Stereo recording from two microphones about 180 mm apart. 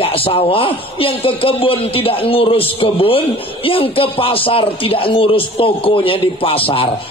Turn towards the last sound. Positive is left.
turn(degrees=30)  # may be behind; listen again after turning